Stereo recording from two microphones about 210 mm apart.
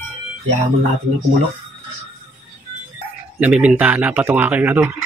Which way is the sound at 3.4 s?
5° right (ahead or behind).